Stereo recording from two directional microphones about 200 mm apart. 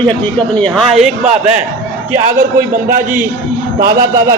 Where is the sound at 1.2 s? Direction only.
35° right (ahead or behind).